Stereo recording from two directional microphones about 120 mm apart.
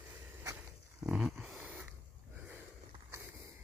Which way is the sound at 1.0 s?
5° right (ahead or behind).